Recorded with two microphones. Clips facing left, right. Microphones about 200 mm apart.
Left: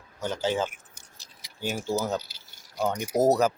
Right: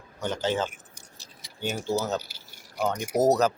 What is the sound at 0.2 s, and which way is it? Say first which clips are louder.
Speech: even; 10° left (ahead or behind).